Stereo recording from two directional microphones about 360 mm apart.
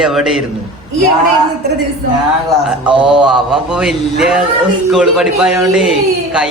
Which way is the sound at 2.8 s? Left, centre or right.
Centre.